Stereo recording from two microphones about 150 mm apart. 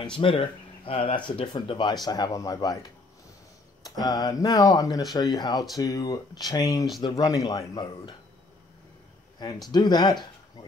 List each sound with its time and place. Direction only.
0.0 s speech: 35° left (ahead or behind)
9.7 s speech: 30° left (ahead or behind)